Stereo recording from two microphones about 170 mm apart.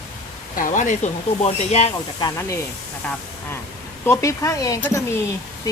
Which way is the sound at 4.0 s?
15° left (ahead or behind).